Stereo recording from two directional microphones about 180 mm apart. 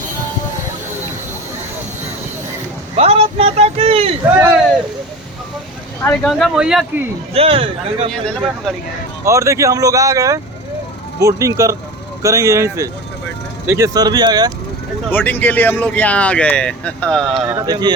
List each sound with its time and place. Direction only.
2.9 s speech: 35° right (ahead or behind)
6.0 s speech: 10° left (ahead or behind)
6.3 s speech: centre (ahead or behind)
7.3 s speech: 30° right (ahead or behind)
8.1 s speech: 5° left (ahead or behind)
9.2 s speech: 15° right (ahead or behind)
15.1 s speech: 10° left (ahead or behind)
17.4 s speech: 15° right (ahead or behind)